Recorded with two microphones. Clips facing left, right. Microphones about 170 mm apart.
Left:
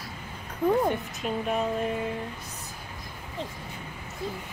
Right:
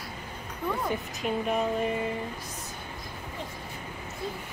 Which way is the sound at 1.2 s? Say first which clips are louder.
Even; centre (ahead or behind).